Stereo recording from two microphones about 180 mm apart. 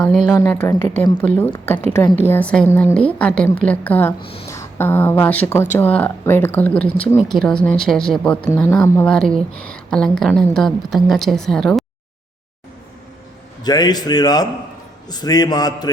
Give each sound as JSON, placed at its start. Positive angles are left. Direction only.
{"t": 0.3, "sound": "a woman's voice", "side_deg": 15}
{"t": 13.7, "sound": "a man's voice", "side_deg": 20}